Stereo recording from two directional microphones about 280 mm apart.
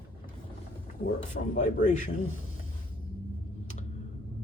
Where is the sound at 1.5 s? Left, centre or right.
Left.